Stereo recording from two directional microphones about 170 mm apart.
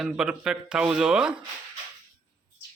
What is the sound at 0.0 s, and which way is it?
Speech, 5° right (ahead or behind).